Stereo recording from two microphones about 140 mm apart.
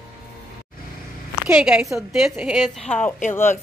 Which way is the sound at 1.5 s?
5° right (ahead or behind).